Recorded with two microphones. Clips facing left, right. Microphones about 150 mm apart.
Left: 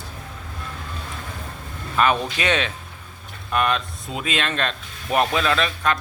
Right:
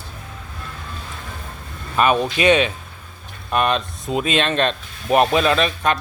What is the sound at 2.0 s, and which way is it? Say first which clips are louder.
Speech: right 3 dB; 15° right (ahead or behind).